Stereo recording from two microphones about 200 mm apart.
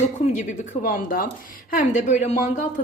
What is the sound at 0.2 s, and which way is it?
A woman's voice, 40° left (ahead or behind).